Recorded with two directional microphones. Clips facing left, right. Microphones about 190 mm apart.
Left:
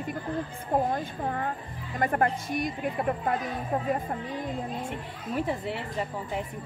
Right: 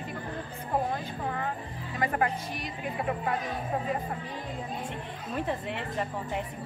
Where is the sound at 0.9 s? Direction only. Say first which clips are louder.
Left 3 dB; 50° left (ahead or behind).